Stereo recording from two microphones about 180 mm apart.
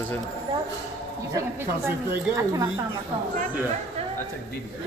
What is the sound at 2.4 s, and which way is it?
Speech, 20° right (ahead or behind).